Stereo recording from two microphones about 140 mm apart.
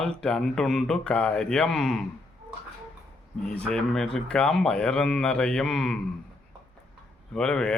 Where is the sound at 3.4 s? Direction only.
5° left (ahead or behind).